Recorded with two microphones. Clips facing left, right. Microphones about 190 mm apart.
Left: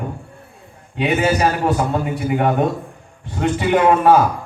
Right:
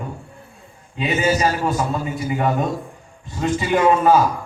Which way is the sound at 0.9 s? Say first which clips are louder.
Left 2 dB; 65° left (ahead or behind).